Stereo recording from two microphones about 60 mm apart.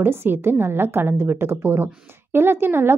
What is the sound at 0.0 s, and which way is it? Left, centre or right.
A woman's voice, right.